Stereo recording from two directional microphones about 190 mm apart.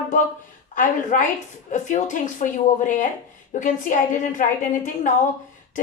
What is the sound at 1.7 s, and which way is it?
A woman's voice, 40° left (ahead or behind).